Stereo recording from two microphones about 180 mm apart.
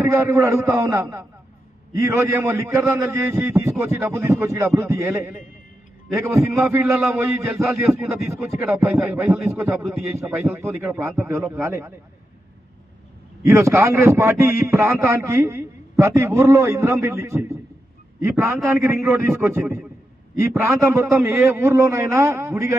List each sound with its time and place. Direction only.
0.0 s a man's voice: 15° right (ahead or behind)
13.4 s a man's voice: 15° right (ahead or behind)